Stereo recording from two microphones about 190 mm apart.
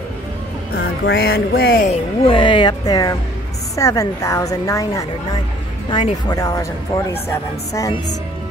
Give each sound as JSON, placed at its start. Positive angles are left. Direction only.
{"t": 0.7, "sound": "music", "side_deg": 60}
{"t": 1.9, "sound": "a woman's voice", "side_deg": 25}